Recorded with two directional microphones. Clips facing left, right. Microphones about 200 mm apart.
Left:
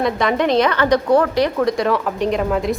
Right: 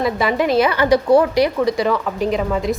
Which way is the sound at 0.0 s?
5° right (ahead or behind).